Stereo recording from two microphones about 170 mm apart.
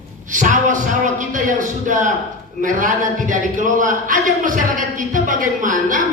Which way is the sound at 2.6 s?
50° right (ahead or behind).